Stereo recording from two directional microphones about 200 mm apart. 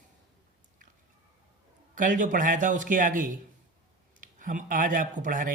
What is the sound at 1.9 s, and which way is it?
Speech, 40° right (ahead or behind).